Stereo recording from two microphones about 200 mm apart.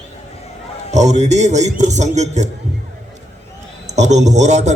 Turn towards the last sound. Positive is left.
turn(degrees=-35)  # may be behind; listen again after turning